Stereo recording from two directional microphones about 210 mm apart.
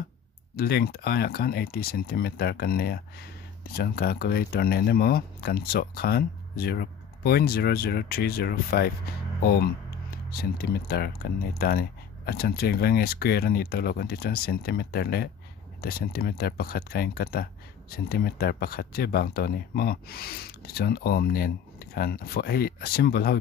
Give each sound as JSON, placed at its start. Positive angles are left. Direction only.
{"t": 0.6, "sound": "speech", "side_deg": 45}